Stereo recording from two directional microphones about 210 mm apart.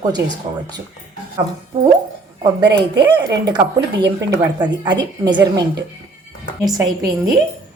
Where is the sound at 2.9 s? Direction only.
50° right (ahead or behind).